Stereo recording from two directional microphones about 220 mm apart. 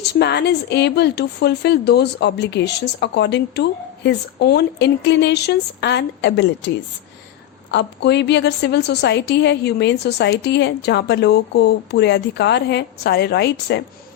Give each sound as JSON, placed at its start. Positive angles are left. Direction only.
{"t": 0.2, "sound": "speech", "side_deg": 50}
{"t": 7.7, "sound": "speech", "side_deg": 50}